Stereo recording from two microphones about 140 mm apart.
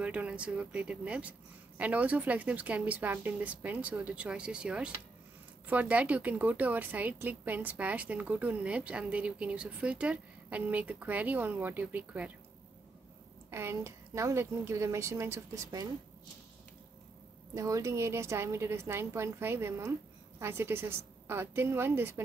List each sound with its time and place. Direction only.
0.0 s a woman's voice: 10° right (ahead or behind)
13.5 s a woman's voice: 20° right (ahead or behind)
17.6 s a woman's voice: 25° right (ahead or behind)